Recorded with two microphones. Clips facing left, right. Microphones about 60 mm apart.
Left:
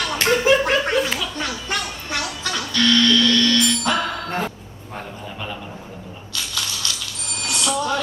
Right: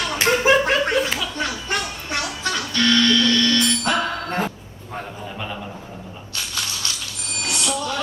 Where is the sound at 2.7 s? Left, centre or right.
Right.